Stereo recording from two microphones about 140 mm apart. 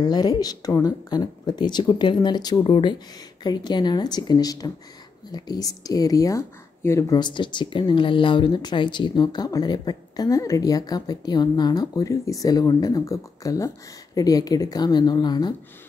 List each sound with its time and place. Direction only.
0.0 s speech: 30° left (ahead or behind)